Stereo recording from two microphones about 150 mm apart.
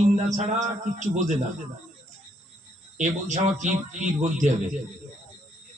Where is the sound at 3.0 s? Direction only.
55° right (ahead or behind).